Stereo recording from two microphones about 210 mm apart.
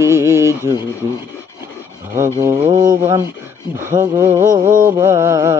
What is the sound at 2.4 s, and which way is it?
Speech, 15° right (ahead or behind).